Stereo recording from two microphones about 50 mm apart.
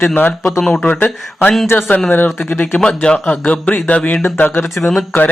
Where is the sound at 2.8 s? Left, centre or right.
Centre.